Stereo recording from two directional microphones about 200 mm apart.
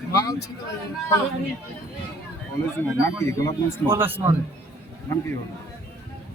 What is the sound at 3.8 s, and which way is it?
Speech, 10° right (ahead or behind).